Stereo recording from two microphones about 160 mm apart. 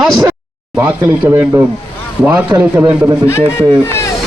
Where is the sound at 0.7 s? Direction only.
10° right (ahead or behind).